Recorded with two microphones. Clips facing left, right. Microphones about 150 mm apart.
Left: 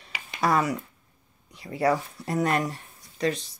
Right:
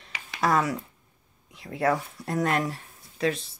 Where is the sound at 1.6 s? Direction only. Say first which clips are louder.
Left 1 dB; centre (ahead or behind).